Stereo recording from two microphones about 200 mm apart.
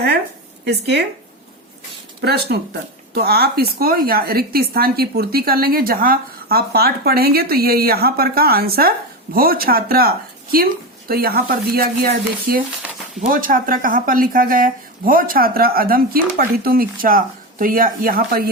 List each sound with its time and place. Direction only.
0.6 s speech: 55° right (ahead or behind)
2.2 s speech: 55° right (ahead or behind)